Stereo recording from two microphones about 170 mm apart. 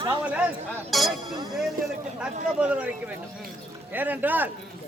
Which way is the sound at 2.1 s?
5° right (ahead or behind).